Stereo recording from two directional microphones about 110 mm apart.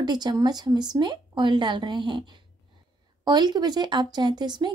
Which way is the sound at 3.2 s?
40° right (ahead or behind).